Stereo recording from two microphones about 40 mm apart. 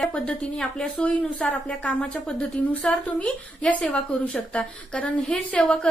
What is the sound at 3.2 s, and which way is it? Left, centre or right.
A woman's voice, left.